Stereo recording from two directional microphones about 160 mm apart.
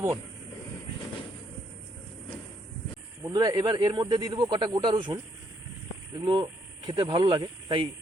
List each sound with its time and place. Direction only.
3.2 s speech: 25° right (ahead or behind)
6.1 s speech: 25° right (ahead or behind)